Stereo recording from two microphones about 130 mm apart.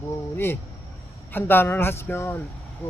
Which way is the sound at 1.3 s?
15° left (ahead or behind).